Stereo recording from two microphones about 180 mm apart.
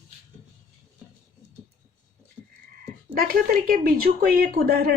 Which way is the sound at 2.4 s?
5° right (ahead or behind).